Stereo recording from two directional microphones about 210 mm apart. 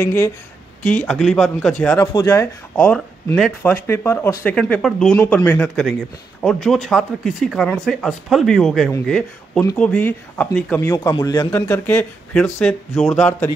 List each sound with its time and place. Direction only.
0.0 s speech: 10° left (ahead or behind)
1.0 s speech: centre (ahead or behind)